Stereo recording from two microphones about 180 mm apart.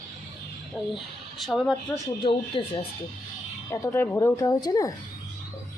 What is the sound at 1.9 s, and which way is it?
Speech, 30° left (ahead or behind).